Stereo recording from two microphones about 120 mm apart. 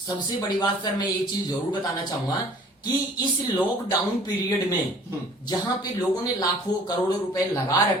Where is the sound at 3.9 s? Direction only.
35° left (ahead or behind).